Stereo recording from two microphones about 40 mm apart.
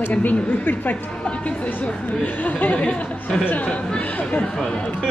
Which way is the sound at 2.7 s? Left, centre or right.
Left.